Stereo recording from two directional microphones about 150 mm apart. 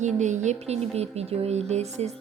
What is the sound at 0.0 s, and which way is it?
Speech, 50° right (ahead or behind).